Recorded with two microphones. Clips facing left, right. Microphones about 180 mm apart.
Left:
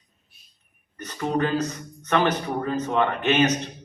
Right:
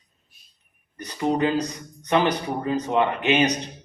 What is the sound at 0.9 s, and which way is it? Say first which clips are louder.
Speech: right 2 dB; 15° right (ahead or behind).